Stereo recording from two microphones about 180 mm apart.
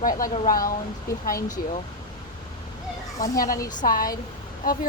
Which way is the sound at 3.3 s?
50° left (ahead or behind).